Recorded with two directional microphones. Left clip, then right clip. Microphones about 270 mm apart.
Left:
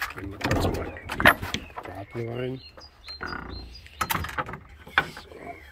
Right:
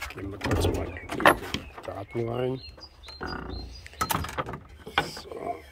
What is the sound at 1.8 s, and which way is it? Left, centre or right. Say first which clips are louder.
Speech: right 2 dB; centre.